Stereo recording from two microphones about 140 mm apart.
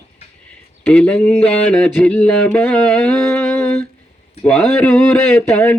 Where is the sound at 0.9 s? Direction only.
10° left (ahead or behind).